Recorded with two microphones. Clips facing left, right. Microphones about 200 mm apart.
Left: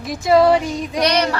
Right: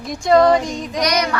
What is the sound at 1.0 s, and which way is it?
Child singing, 30° left (ahead or behind).